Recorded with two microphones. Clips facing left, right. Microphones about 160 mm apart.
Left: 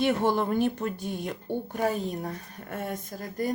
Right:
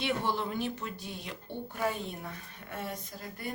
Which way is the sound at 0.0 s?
45° left (ahead or behind).